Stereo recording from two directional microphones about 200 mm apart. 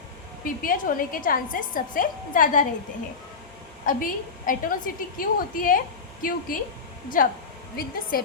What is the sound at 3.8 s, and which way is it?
A woman's voice, 45° left (ahead or behind).